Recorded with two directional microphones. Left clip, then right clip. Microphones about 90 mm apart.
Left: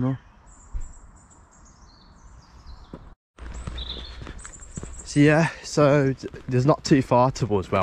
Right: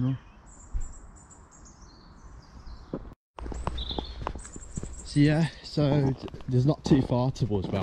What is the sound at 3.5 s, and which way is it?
Horse, centre (ahead or behind).